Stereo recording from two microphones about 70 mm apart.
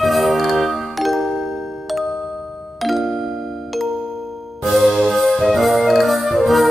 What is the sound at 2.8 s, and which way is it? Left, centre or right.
Music, centre.